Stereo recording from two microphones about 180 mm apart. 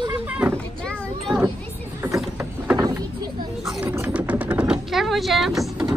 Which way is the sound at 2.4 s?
20° right (ahead or behind).